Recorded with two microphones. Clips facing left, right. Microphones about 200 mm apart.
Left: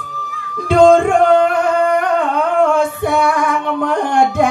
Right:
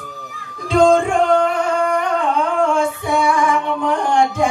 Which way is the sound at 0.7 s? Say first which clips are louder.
Left 4 dB; 60° left (ahead or behind).